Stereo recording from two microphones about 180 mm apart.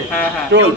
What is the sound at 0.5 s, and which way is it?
Speech, 80° right.